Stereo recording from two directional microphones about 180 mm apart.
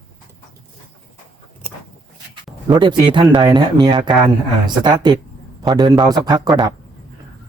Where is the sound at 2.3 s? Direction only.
25° right (ahead or behind).